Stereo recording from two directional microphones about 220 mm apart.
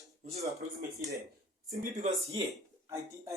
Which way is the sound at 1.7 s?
35° right (ahead or behind).